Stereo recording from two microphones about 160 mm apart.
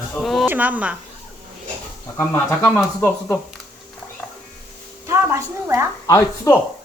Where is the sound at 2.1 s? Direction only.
15° left (ahead or behind).